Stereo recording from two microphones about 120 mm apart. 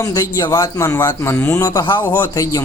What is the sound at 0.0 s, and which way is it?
Speech, 30° left (ahead or behind).